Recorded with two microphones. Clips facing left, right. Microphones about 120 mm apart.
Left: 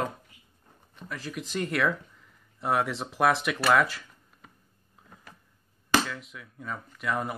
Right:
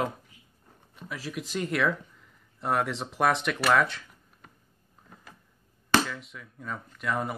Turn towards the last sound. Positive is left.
turn(degrees=0)  # may be behind; listen again after turning